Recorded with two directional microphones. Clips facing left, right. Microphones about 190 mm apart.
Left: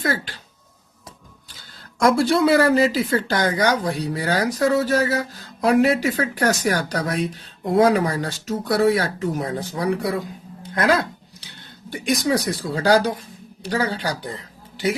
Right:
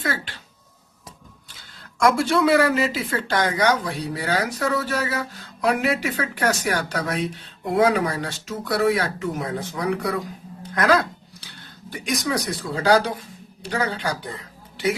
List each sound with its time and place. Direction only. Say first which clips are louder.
2.0 s speech: left 2 dB; 35° left (ahead or behind)